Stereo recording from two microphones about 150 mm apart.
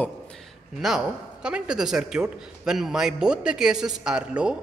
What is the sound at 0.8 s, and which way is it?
Speech, 5° right (ahead or behind).